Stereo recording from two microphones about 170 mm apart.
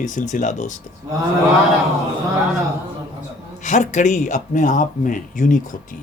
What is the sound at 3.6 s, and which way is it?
A man's voice, 45° left (ahead or behind).